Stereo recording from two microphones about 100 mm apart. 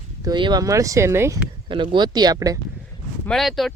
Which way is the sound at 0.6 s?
35° right (ahead or behind).